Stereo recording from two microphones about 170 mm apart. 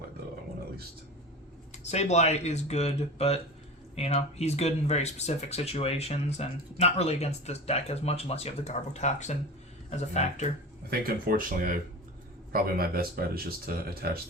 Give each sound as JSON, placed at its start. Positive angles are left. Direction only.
{"t": 1.9, "sound": "speech", "side_deg": 40}
{"t": 10.8, "sound": "speech", "side_deg": -60}